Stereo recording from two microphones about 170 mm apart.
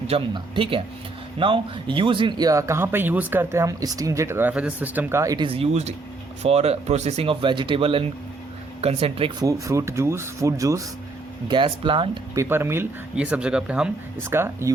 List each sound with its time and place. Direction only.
0.1 s speech: 30° right (ahead or behind)
5.5 s speech: 40° right (ahead or behind)
9.4 s speech: 20° right (ahead or behind)
12.3 s speech: 15° right (ahead or behind)